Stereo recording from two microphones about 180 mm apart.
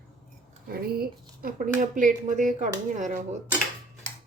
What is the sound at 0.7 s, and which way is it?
Speech, 60° right (ahead or behind).